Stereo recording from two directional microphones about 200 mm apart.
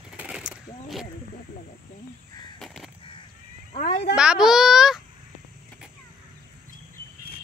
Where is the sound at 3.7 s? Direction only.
40° left (ahead or behind).